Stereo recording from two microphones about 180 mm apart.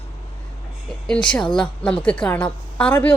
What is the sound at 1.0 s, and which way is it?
A woman's voice, 5° left (ahead or behind).